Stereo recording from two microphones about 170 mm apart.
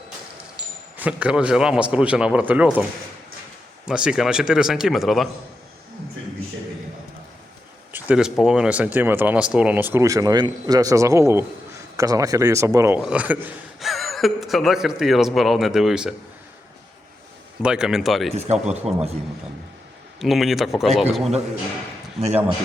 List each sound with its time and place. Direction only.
0.9 s speech: 10° right (ahead or behind)
3.8 s speech: 5° right (ahead or behind)
7.9 s speech: 5° right (ahead or behind)
17.6 s speech: 5° right (ahead or behind)
18.3 s speech: 40° right (ahead or behind)
20.1 s speech: centre (ahead or behind)